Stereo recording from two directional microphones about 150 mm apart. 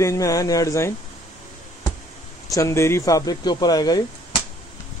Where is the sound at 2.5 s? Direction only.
20° left (ahead or behind).